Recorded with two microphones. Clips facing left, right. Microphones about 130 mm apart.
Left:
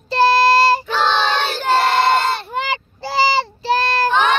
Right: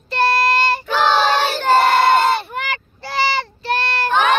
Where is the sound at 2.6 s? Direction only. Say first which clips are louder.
Left 3 dB; 30° left (ahead or behind).